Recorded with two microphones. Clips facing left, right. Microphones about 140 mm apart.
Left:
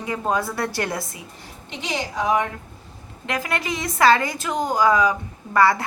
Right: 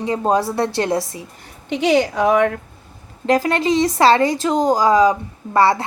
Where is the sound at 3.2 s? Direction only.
35° right (ahead or behind).